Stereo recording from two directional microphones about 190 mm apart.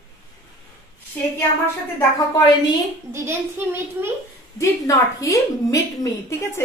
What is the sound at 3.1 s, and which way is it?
A child's voice, 15° right (ahead or behind).